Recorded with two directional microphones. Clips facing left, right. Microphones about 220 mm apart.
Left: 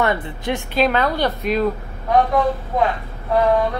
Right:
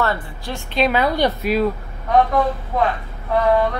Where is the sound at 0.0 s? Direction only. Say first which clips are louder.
Left 2 dB; 20° left (ahead or behind).